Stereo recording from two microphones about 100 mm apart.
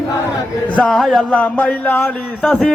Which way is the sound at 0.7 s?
5° left (ahead or behind).